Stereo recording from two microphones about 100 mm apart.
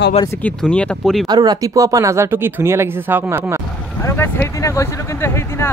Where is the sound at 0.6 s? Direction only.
10° left (ahead or behind).